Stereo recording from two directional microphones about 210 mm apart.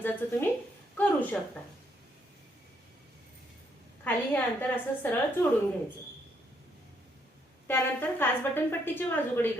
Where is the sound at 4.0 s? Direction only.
10° left (ahead or behind).